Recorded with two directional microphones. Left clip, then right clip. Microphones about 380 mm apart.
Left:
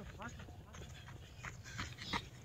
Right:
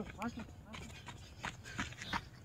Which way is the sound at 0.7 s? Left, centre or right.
Right.